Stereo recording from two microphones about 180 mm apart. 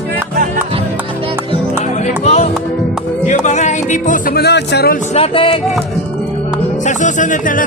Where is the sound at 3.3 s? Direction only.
40° left (ahead or behind); by 5.0 s 60° left (ahead or behind).